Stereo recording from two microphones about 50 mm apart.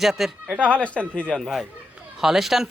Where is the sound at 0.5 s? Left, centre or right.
Left.